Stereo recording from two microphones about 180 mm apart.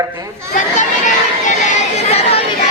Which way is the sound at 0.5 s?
45° left (ahead or behind).